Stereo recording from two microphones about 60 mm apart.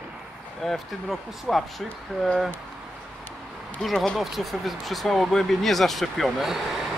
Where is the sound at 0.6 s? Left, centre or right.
Centre.